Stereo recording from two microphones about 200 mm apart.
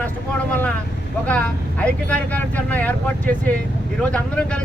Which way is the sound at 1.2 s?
5° left (ahead or behind).